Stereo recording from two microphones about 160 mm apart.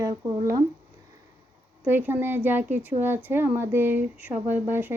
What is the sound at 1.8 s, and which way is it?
Speech, 10° right (ahead or behind).